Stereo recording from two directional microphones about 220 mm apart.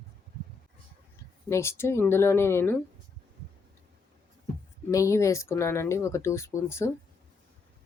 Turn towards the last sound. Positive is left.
turn(degrees=10)  # may be behind; listen again after turning